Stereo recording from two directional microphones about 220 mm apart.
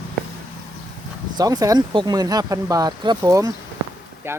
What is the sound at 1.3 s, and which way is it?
Speech, 15° right (ahead or behind).